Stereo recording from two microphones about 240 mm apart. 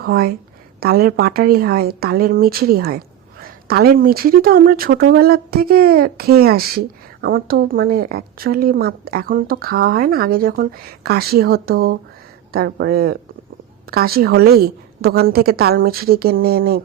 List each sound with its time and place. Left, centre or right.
0.0 s speech: right